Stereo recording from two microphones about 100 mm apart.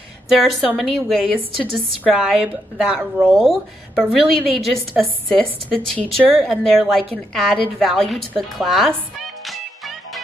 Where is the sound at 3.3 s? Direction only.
Centre (ahead or behind).